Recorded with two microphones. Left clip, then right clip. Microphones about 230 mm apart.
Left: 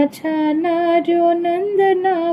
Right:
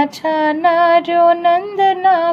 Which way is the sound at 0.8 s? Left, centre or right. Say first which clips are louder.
Right 4 dB; right.